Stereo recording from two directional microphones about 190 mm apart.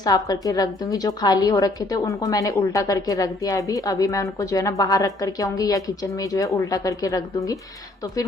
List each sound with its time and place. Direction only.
0.0 s a woman's voice: 20° left (ahead or behind)